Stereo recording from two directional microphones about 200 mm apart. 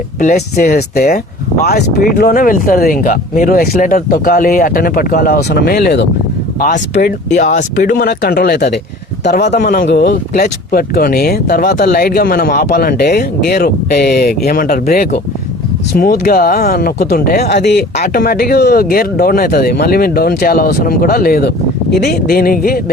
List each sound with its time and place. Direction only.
0.3 s speech: 50° left (ahead or behind)
6.9 s speech: 40° left (ahead or behind)